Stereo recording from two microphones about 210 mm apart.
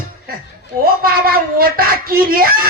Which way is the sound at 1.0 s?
45° right (ahead or behind).